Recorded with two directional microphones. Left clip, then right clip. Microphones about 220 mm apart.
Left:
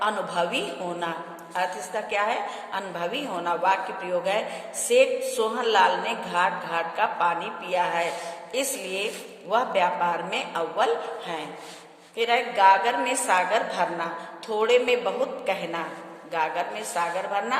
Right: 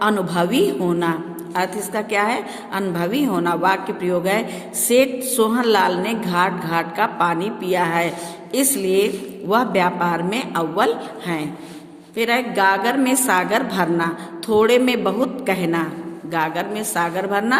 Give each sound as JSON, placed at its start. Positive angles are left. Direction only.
{"t": 0.0, "sound": "a woman's voice", "side_deg": -50}